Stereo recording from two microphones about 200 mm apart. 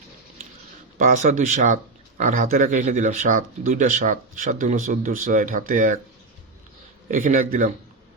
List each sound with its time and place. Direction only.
0.9 s speech: 40° right (ahead or behind)
7.1 s a man's voice: 40° right (ahead or behind)